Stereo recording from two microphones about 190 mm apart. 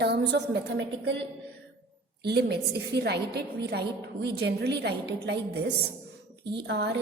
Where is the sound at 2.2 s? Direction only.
60° right (ahead or behind).